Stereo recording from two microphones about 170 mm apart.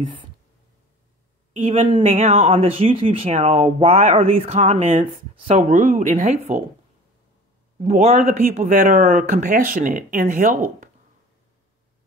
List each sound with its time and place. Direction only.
0.0 s speech: 30° right (ahead or behind)
1.7 s speech: 30° right (ahead or behind)
2.0 s speech: 40° right (ahead or behind)
7.8 s speech: 40° right (ahead or behind)